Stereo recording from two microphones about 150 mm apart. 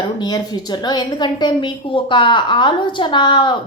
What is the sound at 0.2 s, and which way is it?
A woman's voice, 25° left (ahead or behind).